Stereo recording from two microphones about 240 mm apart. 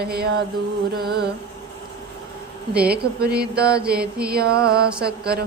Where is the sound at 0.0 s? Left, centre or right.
Right.